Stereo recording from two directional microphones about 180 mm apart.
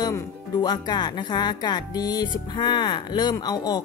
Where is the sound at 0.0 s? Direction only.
20° left (ahead or behind).